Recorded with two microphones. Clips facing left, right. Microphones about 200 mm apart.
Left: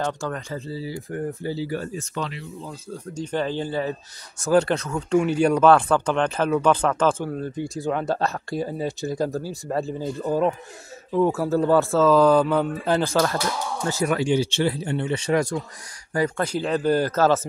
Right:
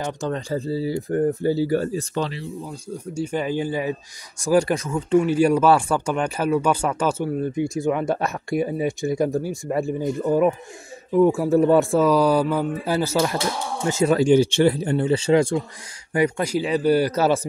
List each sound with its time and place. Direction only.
0.3 s speech: 30° right (ahead or behind)
2.6 s speech: 15° right (ahead or behind)
7.6 s speech: 35° left (ahead or behind)
8.1 s speech: 15° right (ahead or behind)
13.4 s speech: 20° right (ahead or behind)
14.1 s speech: 45° right (ahead or behind); by 15.6 s 25° right (ahead or behind)
16.1 s speech: 15° right (ahead or behind)